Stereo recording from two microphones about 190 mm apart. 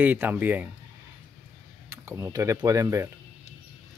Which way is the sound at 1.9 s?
15° right (ahead or behind).